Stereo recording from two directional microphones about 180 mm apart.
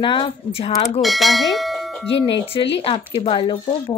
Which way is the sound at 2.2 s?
30° left (ahead or behind).